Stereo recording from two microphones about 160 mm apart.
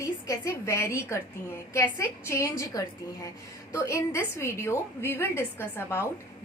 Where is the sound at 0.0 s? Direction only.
20° left (ahead or behind).